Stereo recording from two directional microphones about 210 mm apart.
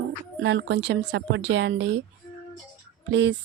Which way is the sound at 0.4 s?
55° right (ahead or behind).